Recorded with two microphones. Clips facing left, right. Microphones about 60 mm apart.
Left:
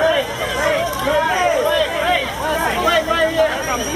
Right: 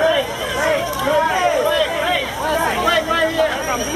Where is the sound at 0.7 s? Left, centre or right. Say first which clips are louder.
Even; centre.